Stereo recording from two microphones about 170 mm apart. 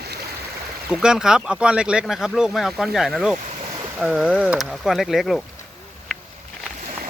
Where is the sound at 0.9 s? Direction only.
5° right (ahead or behind).